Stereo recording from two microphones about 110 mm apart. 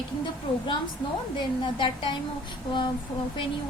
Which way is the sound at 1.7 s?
50° left (ahead or behind).